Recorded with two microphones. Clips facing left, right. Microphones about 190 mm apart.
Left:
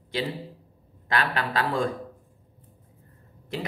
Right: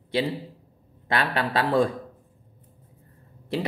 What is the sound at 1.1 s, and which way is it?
Speech, 30° right (ahead or behind).